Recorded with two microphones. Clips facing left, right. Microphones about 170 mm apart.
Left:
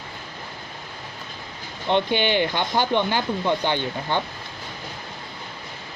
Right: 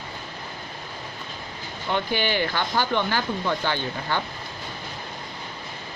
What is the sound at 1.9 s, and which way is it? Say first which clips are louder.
Speech: left 4 dB; 20° left (ahead or behind).